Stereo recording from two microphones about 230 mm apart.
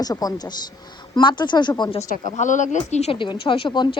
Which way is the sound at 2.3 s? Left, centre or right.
Left.